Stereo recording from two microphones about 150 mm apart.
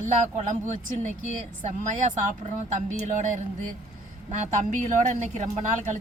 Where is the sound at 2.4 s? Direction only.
55° right (ahead or behind).